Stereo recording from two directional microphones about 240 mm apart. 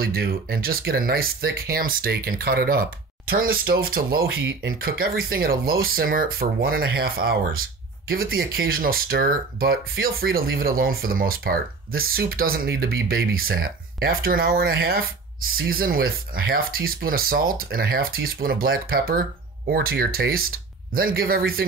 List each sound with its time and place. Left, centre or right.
0.0 s speech: right